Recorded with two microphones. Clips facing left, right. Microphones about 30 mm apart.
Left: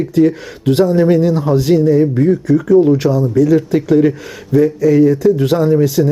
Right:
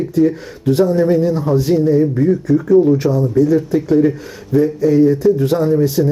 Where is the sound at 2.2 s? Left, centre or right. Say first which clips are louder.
Left 2 dB; left.